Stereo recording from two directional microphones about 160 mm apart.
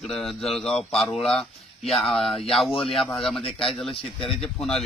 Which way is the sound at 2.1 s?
Centre (ahead or behind).